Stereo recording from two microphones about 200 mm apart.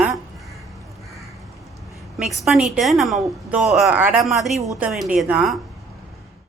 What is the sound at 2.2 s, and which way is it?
Speech, centre (ahead or behind).